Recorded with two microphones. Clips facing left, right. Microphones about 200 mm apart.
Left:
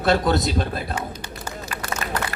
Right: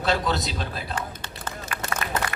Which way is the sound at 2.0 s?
35° left (ahead or behind).